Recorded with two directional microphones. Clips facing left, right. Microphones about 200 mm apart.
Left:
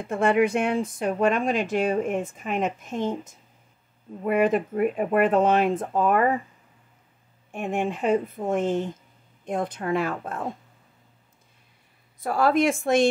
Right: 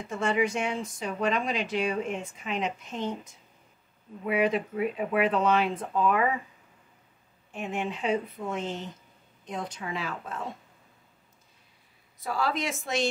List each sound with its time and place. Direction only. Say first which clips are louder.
0.0 s speech: left 6 dB; 55° left (ahead or behind)
7.5 s speech: left 5 dB; 50° left (ahead or behind)
12.2 s speech: left 8 dB; 55° left (ahead or behind)